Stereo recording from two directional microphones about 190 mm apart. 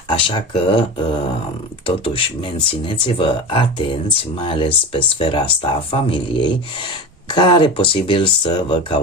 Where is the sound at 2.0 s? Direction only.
30° left (ahead or behind).